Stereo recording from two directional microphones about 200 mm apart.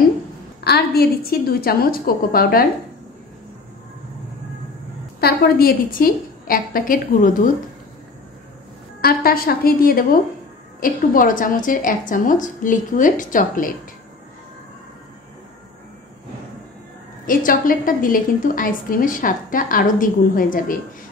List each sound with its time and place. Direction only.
0.7 s a woman's voice: 50° left (ahead or behind)
5.2 s a woman's voice: 50° left (ahead or behind)
9.0 s a woman's voice: 50° left (ahead or behind)
17.3 s a woman's voice: 45° left (ahead or behind)